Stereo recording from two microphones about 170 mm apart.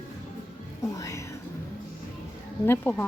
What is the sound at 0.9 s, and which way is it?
Speech, 20° left (ahead or behind).